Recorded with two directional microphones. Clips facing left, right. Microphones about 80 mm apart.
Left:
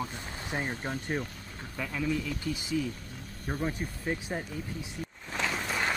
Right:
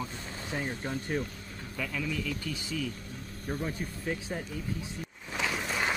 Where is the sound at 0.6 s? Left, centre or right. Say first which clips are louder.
Even; left.